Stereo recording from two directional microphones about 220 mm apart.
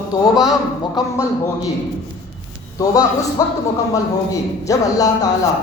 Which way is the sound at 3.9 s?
15° left (ahead or behind).